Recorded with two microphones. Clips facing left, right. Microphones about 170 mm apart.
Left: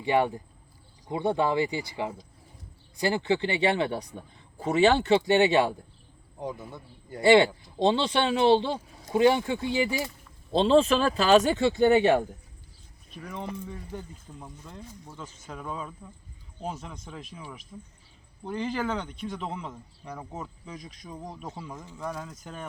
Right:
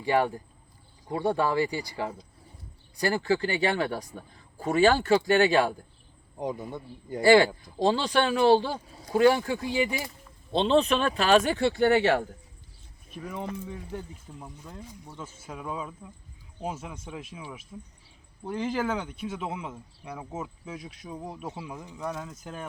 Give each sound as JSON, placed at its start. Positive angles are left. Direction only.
{"t": 0.0, "sound": "speech", "side_deg": 20}
{"t": 6.4, "sound": "a man's voice", "side_deg": -15}
{"t": 7.2, "sound": "speech", "side_deg": 25}
{"t": 10.6, "sound": "speech", "side_deg": 35}
{"t": 13.1, "sound": "speech", "side_deg": -10}